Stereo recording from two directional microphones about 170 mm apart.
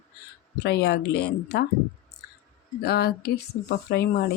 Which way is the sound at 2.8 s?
70° left (ahead or behind).